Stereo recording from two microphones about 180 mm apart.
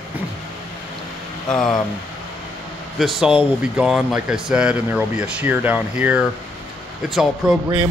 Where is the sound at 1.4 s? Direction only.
5° left (ahead or behind).